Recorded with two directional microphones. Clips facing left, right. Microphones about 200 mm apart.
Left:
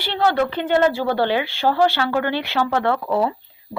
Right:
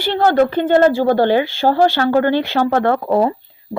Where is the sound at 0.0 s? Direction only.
45° right (ahead or behind).